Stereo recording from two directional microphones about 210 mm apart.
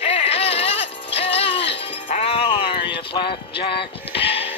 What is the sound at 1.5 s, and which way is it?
Music, 55° left (ahead or behind).